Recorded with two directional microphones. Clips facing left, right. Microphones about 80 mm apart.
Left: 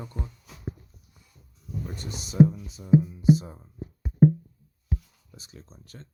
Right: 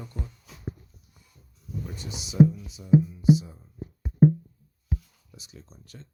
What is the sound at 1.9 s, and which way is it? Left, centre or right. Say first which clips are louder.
Speech: even; left.